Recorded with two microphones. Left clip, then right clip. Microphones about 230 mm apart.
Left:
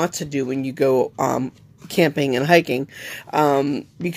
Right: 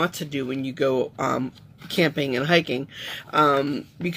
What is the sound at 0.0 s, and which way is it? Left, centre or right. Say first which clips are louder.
Speech: left 3 dB; left.